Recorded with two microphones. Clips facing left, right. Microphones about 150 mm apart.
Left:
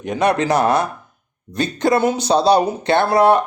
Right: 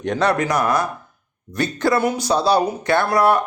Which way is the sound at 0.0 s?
5° left (ahead or behind).